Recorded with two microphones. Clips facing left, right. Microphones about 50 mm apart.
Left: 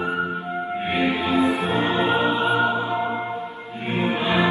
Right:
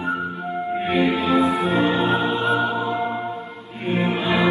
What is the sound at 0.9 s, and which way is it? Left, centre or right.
Music, centre.